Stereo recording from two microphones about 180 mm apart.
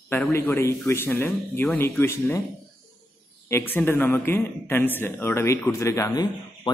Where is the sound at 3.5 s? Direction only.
10° left (ahead or behind).